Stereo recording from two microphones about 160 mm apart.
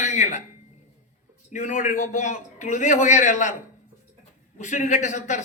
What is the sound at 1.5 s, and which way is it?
Speech, 50° left (ahead or behind).